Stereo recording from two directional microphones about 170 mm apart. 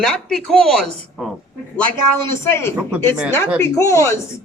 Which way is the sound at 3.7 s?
15° left (ahead or behind).